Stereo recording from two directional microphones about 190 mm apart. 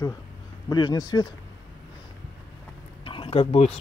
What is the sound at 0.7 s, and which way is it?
Speech, 20° left (ahead or behind).